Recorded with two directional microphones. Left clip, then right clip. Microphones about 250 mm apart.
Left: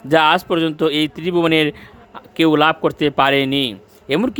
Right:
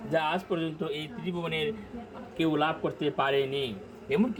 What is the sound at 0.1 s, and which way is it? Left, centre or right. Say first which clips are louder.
A man's voice: left 15 dB; left.